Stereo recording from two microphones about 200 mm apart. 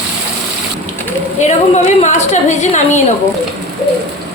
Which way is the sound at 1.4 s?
35° left (ahead or behind).